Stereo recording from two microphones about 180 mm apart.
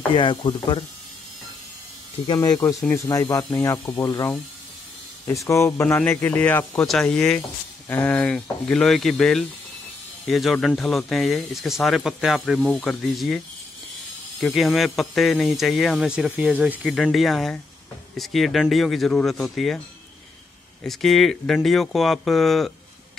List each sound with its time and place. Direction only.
0.1 s speech: 25° left (ahead or behind)
2.2 s a man's voice: 20° left (ahead or behind); by 13.4 s centre (ahead or behind)
14.4 s speech: centre (ahead or behind)
20.8 s speech: centre (ahead or behind)